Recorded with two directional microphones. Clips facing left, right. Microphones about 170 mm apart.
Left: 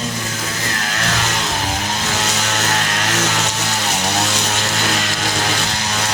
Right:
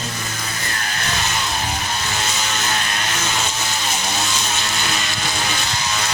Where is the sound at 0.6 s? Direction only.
90° left; by 6.1 s 70° left (ahead or behind).